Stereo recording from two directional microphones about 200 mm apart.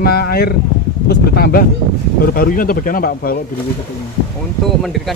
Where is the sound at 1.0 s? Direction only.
50° left (ahead or behind).